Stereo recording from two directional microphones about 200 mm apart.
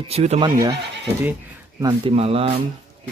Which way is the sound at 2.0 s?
30° right (ahead or behind).